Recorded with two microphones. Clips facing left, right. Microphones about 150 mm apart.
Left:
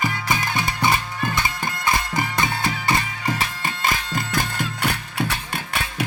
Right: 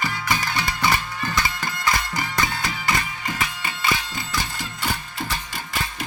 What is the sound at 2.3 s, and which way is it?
Music, 30° left (ahead or behind).